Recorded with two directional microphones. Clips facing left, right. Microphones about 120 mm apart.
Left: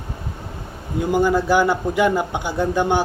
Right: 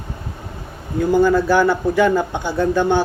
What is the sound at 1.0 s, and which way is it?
Speech, 15° left (ahead or behind).